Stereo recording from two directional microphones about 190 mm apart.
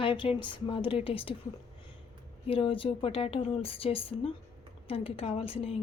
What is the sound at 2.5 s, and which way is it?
A woman's voice, 30° left (ahead or behind).